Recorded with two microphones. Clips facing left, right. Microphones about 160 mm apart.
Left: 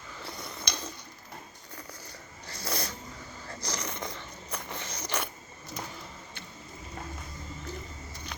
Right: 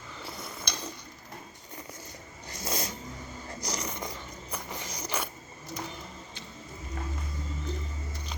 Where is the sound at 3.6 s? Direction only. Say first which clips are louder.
Right 1 dB; 10° right (ahead or behind).